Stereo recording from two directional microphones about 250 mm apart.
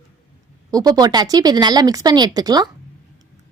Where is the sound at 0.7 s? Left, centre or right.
Centre.